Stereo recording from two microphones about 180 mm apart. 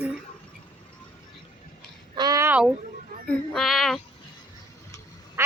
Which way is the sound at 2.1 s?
20° right (ahead or behind).